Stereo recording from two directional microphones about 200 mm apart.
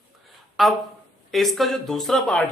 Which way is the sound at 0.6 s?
Centre (ahead or behind).